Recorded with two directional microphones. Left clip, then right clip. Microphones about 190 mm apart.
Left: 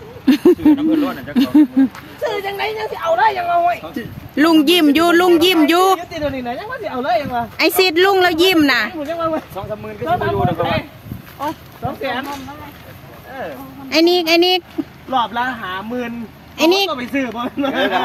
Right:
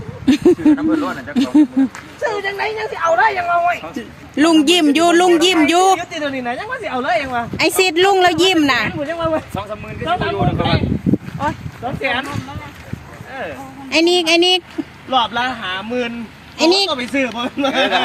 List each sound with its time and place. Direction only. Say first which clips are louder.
0.3 s speech: left 1 dB; 10° left (ahead or behind); by 10.5 s 25° right (ahead or behind)
13.9 s speech: even; 5° left (ahead or behind)
15.1 s speech: right 1 dB; 30° right (ahead or behind)
16.6 s speech: even; 5° left (ahead or behind)
16.9 s speech: right 2 dB; 40° right (ahead or behind)